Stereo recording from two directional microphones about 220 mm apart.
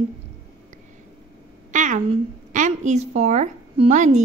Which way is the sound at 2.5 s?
35° right (ahead or behind).